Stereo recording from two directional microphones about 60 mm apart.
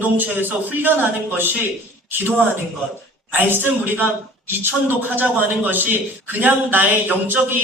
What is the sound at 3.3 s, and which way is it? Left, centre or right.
A woman's voice, right.